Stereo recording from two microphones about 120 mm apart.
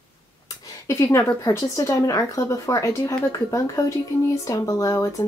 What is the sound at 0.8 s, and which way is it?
A woman's voice, 25° left (ahead or behind).